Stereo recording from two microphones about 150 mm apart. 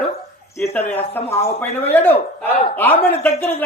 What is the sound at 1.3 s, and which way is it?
Speech, 15° left (ahead or behind).